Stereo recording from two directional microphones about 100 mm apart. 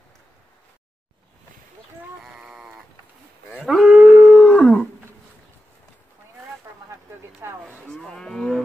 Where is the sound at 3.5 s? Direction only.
5° right (ahead or behind).